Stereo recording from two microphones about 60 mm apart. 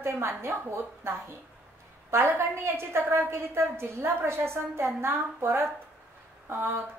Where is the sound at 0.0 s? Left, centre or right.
Right.